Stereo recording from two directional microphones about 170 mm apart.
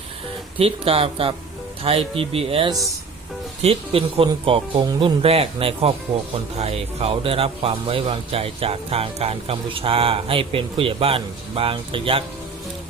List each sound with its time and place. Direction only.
0.6 s a man's voice: 35° right (ahead or behind)